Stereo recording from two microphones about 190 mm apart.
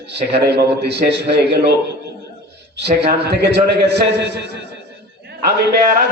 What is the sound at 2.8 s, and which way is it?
A man's voice, 60° right (ahead or behind).